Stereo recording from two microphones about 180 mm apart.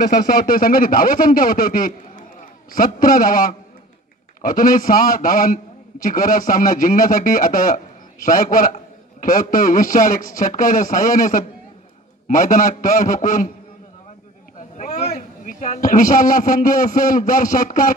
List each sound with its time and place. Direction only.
0.0 s a man's voice: 50° left (ahead or behind)
14.8 s a man's voice: 40° left (ahead or behind)